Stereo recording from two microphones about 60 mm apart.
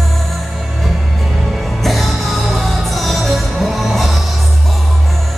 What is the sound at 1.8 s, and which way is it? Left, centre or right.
Music, centre.